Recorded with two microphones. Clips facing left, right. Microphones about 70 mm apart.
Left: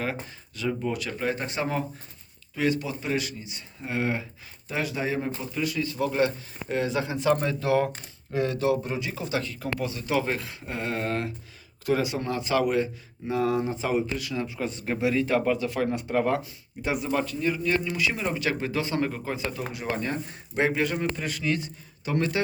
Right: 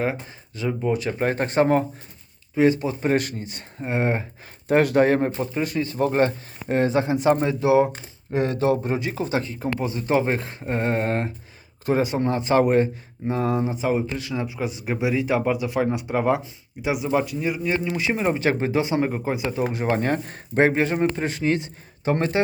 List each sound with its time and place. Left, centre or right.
0.0 s speech: right
1.2 s speech: right
2.6 s speech: right
3.8 s speech: right
4.7 s speech: right; by 7.9 s centre
8.3 s speech: right
19.7 s speech: right
20.1 s speech: right
20.6 s speech: right